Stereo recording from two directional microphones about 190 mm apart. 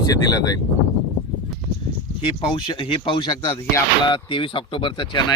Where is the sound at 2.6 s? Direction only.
30° left (ahead or behind).